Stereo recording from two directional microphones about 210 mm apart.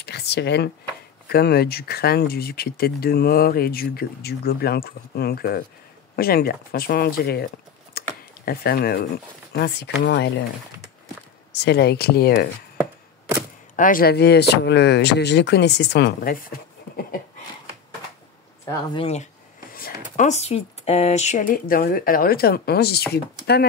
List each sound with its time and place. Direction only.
0.0 s a sound: 50° left (ahead or behind)
1.3 s speech: 50° left (ahead or behind)
11.5 s speech: 55° left (ahead or behind)
13.7 s speech: 40° left (ahead or behind)
18.7 s speech: 25° left (ahead or behind)
19.7 s speech: 40° left (ahead or behind)